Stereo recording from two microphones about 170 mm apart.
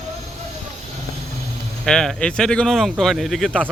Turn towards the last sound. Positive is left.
turn(degrees=5)  # may be behind; listen again after turning